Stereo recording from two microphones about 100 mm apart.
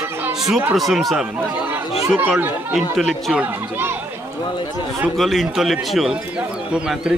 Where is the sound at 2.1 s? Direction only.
20° right (ahead or behind).